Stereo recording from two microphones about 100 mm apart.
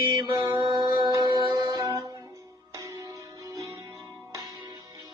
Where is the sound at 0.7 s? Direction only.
40° right (ahead or behind).